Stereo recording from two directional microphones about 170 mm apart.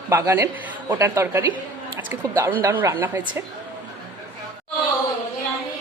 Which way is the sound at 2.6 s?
20° right (ahead or behind).